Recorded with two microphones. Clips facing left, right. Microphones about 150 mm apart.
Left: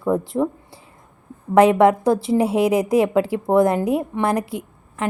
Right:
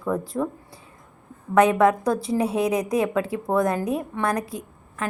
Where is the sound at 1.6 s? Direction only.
30° left (ahead or behind).